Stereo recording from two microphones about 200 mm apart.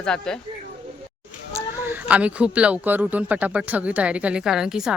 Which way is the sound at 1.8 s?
10° right (ahead or behind).